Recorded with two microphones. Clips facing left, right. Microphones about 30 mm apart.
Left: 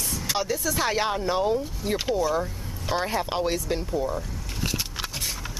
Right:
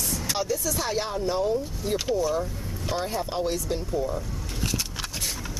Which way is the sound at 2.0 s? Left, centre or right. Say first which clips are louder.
Left 1 dB; centre.